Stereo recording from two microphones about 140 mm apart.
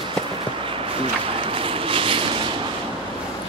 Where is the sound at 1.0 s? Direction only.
40° right (ahead or behind).